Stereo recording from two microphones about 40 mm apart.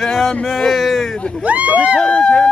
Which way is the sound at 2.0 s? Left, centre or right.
Centre.